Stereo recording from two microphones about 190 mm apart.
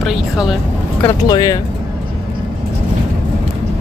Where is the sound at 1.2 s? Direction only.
20° left (ahead or behind).